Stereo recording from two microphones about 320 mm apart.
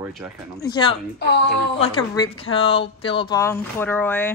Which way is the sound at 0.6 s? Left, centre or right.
Centre.